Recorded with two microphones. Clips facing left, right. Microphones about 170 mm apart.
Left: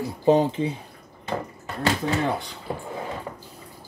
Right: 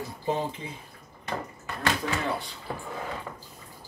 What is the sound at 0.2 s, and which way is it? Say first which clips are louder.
Speech: left 11 dB; 80° left.